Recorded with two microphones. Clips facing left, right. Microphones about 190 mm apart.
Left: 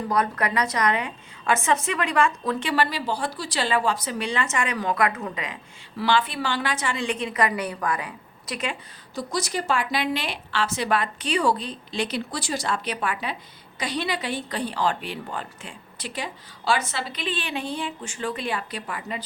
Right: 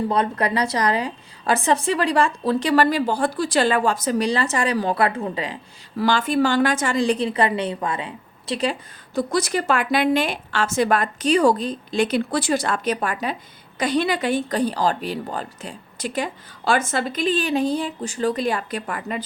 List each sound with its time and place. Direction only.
0.1 s a woman's voice: 30° right (ahead or behind)
6.0 s a woman's voice: 45° right (ahead or behind)
9.1 s speech: 60° right (ahead or behind)